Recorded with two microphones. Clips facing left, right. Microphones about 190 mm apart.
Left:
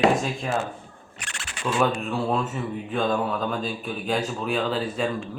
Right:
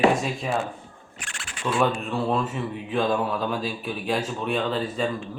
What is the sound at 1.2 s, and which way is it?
Camera, 70° left (ahead or behind).